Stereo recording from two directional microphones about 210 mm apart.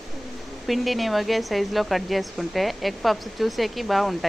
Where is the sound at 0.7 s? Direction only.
Centre (ahead or behind).